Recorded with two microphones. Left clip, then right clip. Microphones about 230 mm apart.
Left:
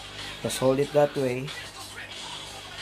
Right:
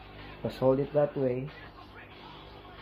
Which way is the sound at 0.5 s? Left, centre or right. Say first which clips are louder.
Left 4 dB; centre.